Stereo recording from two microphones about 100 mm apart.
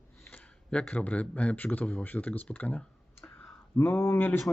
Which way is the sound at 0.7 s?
10° left (ahead or behind).